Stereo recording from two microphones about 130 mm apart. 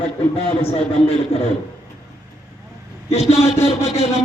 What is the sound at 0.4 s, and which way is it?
Speech, 45° left (ahead or behind).